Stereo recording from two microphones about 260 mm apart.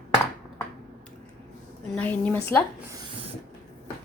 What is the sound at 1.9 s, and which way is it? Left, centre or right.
Speech, centre.